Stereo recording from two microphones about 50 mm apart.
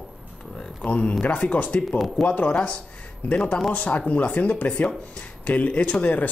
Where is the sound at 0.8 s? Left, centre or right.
Left.